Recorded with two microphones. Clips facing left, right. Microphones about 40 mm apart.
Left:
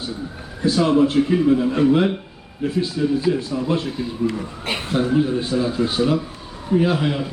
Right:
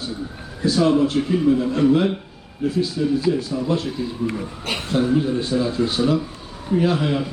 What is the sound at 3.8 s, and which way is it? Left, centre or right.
A man's voice, centre.